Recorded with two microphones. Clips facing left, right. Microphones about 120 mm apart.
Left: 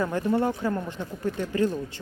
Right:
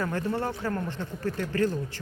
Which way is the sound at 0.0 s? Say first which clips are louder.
Left 4 dB; 15° left (ahead or behind).